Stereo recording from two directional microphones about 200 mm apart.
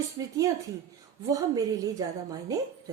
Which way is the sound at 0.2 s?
15° right (ahead or behind).